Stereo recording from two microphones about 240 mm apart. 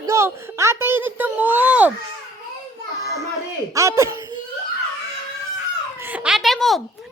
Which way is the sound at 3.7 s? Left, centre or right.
Centre.